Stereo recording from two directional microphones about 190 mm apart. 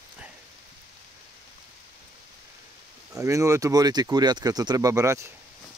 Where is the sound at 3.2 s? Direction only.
15° right (ahead or behind).